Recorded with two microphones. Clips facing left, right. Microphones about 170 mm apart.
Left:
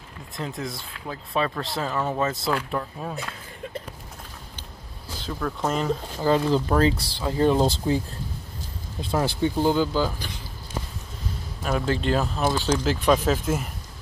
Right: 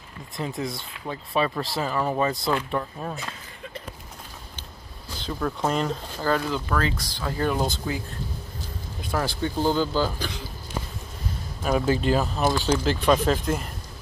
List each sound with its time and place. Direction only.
0.4 s speech: centre (ahead or behind)
5.4 s speech: 5° right (ahead or behind)
6.2 s speech: 25° left (ahead or behind)
9.0 s speech: 20° left (ahead or behind)
11.6 s speech: 10° right (ahead or behind)